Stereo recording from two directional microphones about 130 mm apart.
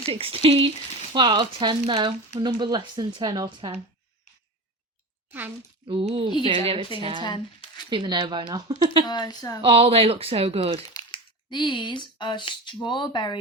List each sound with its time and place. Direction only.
0.0 s speech: 45° right (ahead or behind)
5.8 s speech: 45° right (ahead or behind)
9.0 s a woman's voice: 35° left (ahead or behind)
9.6 s speech: 45° right (ahead or behind)
10.9 s speech: 35° left (ahead or behind)